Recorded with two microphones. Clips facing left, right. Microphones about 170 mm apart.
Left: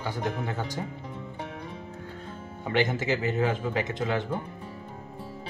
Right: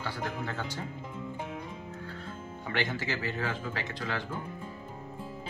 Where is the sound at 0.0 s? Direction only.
20° left (ahead or behind).